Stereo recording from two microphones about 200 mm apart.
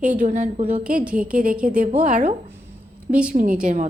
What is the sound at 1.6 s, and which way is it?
A woman's voice, 40° right (ahead or behind).